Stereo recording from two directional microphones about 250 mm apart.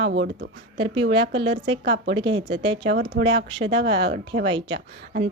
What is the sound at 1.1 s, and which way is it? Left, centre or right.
Speech, centre.